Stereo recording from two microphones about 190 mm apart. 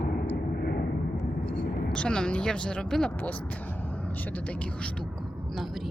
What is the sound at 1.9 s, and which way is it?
Speech, 5° left (ahead or behind).